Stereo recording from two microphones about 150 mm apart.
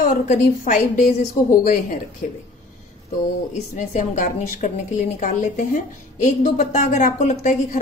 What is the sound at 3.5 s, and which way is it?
A woman's voice, 55° left (ahead or behind).